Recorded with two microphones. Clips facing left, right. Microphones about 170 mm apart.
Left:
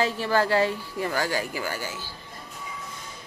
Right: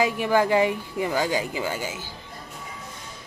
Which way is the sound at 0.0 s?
15° right (ahead or behind).